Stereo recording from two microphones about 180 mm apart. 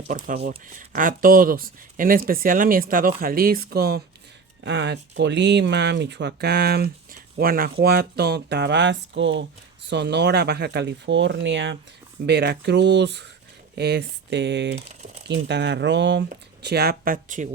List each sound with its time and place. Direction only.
0.4 s speech: 50° right (ahead or behind)
4.6 s speech: 80° right
9.9 s speech: 70° right (ahead or behind)
12.2 s speech: 65° right (ahead or behind)
16.6 s speech: 65° right (ahead or behind); by 17.5 s 45° right (ahead or behind)